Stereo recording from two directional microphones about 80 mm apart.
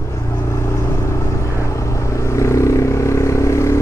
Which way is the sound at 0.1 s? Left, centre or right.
Left.